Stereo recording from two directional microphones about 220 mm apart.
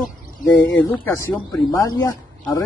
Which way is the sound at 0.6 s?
10° left (ahead or behind).